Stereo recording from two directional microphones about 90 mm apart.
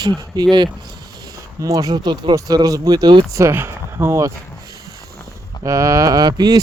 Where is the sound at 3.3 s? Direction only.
30° right (ahead or behind).